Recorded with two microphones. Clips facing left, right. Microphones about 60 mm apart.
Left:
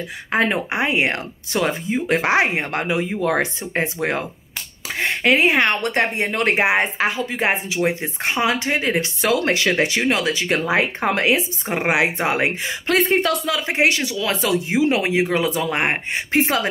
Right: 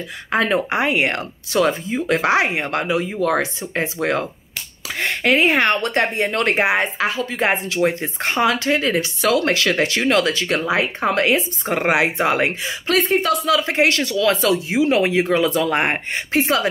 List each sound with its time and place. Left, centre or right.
0.3 s speech: left
3.2 s speech: left
6.8 s speech: left
7.4 s speech: centre
10.7 s speech: left
11.7 s speech: centre
14.7 s speech: left
15.0 s speech: centre
15.9 s speech: left